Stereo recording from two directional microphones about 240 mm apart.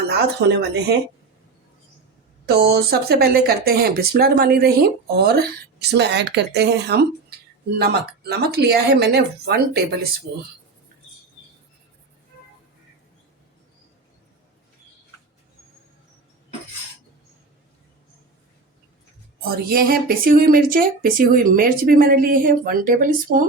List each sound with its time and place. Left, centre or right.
0.1 s speech: right
2.5 s speech: right
19.5 s speech: right